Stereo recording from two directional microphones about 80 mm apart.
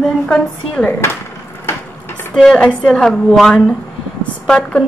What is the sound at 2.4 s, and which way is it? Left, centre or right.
A woman's voice, centre.